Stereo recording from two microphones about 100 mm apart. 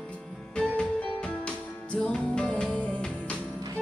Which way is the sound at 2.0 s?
10° left (ahead or behind).